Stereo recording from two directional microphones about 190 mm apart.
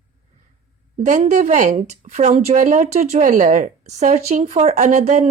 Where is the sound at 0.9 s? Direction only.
40° right (ahead or behind).